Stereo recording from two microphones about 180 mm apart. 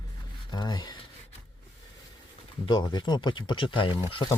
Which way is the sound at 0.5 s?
25° left (ahead or behind).